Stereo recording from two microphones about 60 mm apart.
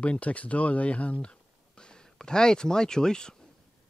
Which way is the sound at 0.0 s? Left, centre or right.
Left.